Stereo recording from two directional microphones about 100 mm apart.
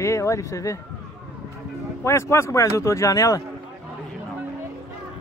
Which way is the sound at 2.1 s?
30° left (ahead or behind).